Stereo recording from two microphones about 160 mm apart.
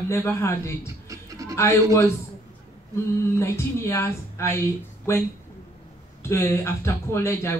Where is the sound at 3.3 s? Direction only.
15° left (ahead or behind).